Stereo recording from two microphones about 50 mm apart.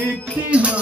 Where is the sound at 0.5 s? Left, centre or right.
Right.